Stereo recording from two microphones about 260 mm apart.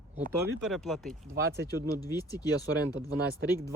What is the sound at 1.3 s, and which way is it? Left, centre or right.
Speech, right.